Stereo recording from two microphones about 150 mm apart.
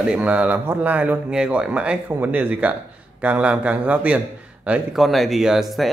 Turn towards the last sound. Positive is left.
turn(degrees=0)  # may be behind; listen again after turning